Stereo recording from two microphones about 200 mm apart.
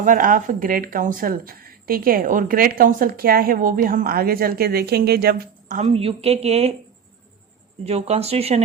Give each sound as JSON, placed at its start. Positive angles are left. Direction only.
{"t": 0.0, "sound": "speech", "side_deg": -40}
{"t": 7.9, "sound": "speech", "side_deg": -30}